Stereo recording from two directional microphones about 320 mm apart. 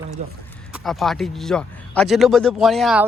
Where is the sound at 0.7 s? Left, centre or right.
Centre.